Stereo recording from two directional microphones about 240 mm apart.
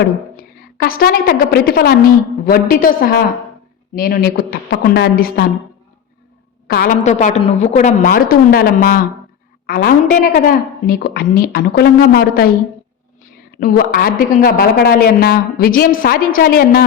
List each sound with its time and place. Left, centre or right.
0.8 s a woman's voice: left
6.7 s a woman's voice: left
13.5 s a woman's voice: left